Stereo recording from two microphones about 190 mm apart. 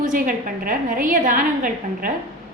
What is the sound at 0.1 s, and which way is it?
A woman's voice, 45° right (ahead or behind).